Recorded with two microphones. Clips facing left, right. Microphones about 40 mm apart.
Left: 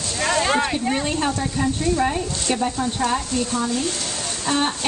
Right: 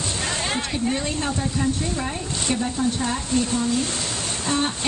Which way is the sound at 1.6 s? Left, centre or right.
Centre.